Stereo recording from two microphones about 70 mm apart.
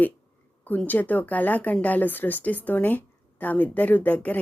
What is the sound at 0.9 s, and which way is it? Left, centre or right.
Speech, left.